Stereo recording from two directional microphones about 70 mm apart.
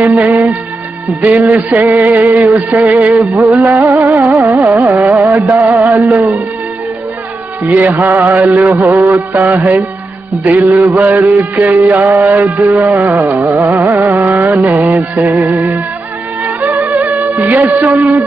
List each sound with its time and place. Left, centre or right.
0.0 s speech: right
1.2 s music: right
7.6 s music: right
16.8 s music: right